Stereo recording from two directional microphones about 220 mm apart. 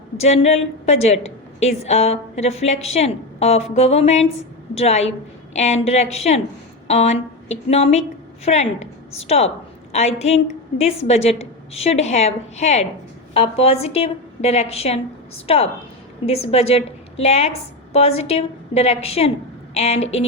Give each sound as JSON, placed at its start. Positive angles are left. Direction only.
{"t": 0.2, "sound": "a woman's voice", "side_deg": 30}